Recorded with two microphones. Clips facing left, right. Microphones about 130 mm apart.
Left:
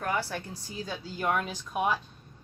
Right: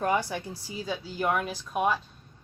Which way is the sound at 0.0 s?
15° right (ahead or behind).